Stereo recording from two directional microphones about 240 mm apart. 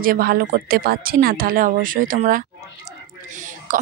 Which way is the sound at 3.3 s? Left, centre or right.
Right.